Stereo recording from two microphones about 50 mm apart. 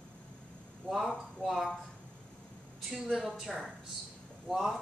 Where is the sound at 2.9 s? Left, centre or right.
Centre.